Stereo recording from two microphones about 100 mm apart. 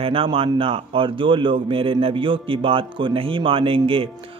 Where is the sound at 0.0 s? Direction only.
65° right (ahead or behind).